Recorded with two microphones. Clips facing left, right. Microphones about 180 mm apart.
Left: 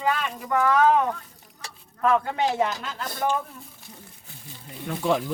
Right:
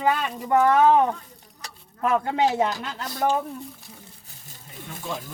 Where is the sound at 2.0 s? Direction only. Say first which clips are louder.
Right 1 dB; 20° right (ahead or behind).